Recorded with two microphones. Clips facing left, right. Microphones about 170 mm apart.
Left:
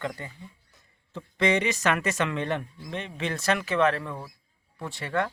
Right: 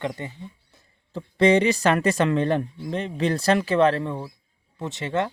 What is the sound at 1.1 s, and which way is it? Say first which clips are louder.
Speech: right 7 dB; 35° right (ahead or behind).